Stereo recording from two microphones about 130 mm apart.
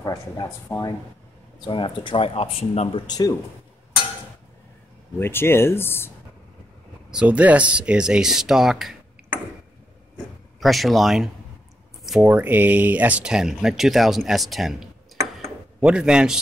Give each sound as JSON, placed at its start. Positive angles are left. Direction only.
{"t": 0.0, "sound": "speech", "side_deg": 25}
{"t": 3.1, "sound": "speech", "side_deg": 30}
{"t": 5.2, "sound": "speech", "side_deg": 20}
{"t": 7.1, "sound": "speech", "side_deg": -10}
{"t": 10.6, "sound": "speech", "side_deg": 0}
{"t": 12.1, "sound": "speech", "side_deg": -10}
{"t": 15.4, "sound": "a sound", "side_deg": -5}